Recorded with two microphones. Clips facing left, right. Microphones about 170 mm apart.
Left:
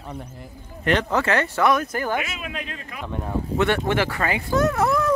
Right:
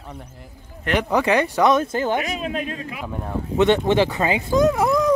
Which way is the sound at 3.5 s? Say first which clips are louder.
Right 5 dB; 20° right (ahead or behind).